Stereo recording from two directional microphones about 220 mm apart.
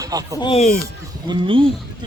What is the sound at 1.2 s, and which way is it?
Speech, 25° right (ahead or behind).